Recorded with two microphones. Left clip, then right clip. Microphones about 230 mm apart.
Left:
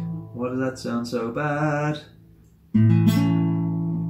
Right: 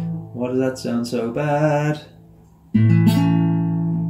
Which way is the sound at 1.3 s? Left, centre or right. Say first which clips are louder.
Right 6 dB; left.